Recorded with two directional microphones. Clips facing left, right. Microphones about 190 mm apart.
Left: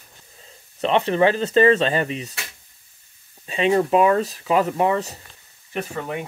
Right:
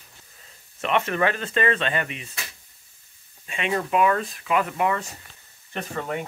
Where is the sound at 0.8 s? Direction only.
30° left (ahead or behind).